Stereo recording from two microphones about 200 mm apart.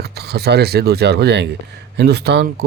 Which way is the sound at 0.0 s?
55° right (ahead or behind).